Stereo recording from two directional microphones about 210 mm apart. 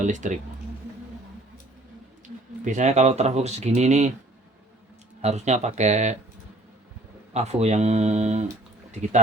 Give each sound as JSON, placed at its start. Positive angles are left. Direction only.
{"t": 0.0, "sound": "speech", "side_deg": -35}
{"t": 2.2, "sound": "speech", "side_deg": -35}
{"t": 5.2, "sound": "speech", "side_deg": -30}
{"t": 7.3, "sound": "speech", "side_deg": -30}